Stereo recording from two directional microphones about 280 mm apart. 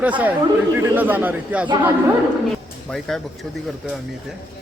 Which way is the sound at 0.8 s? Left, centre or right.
Centre.